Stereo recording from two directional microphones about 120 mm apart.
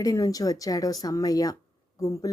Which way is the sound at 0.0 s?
30° left (ahead or behind).